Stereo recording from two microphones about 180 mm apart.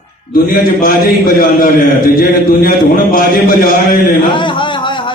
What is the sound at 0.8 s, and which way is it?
Speech, 55° left (ahead or behind).